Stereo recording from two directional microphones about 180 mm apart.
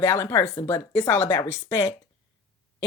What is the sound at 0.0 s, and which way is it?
Speech, 15° left (ahead or behind).